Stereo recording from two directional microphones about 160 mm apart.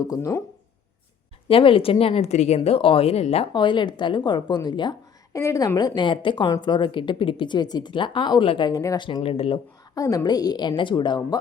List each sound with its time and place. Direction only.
0.0 s speech: 20° left (ahead or behind)
1.5 s a woman's voice: 35° left (ahead or behind)
9.0 s a woman's voice: 35° left (ahead or behind)
9.9 s speech: 20° left (ahead or behind)